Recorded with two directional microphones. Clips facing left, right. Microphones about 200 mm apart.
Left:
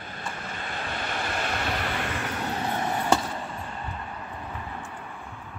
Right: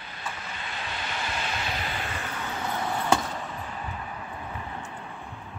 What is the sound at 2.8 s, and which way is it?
Chop, 15° left (ahead or behind).